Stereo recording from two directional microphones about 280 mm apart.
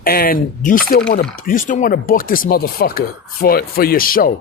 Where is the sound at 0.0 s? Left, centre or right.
Left.